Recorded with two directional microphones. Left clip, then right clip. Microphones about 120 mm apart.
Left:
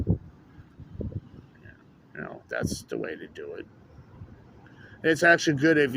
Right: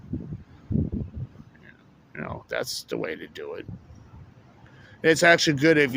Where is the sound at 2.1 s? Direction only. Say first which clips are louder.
Right 3 dB; 90° right.